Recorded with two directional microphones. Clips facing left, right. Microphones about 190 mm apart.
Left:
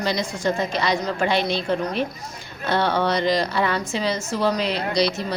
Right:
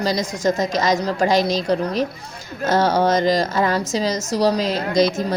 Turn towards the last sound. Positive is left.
turn(degrees=-45)  # may be behind; listen again after turning